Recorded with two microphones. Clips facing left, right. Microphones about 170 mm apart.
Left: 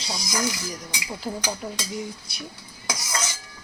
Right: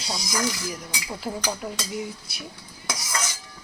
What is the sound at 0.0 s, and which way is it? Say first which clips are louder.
Speech: even; 5° right (ahead or behind).